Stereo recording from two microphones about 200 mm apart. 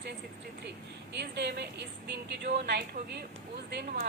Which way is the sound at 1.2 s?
55° right (ahead or behind).